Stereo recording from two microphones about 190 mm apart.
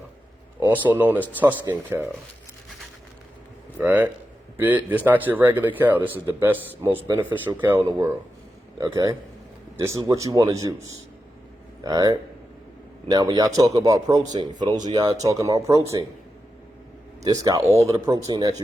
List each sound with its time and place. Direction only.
0.6 s speech: 10° right (ahead or behind)
3.8 s speech: 10° right (ahead or behind)
11.8 s speech: 20° right (ahead or behind)
17.2 s speech: 20° right (ahead or behind)